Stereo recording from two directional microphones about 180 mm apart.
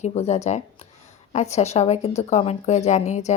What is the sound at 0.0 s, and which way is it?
Speech, 35° left (ahead or behind).